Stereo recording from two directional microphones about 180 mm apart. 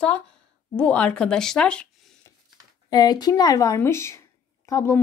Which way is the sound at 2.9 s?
20° left (ahead or behind).